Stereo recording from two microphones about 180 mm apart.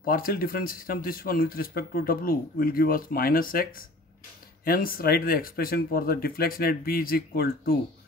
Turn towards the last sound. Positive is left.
turn(degrees=55)  # may be behind; listen again after turning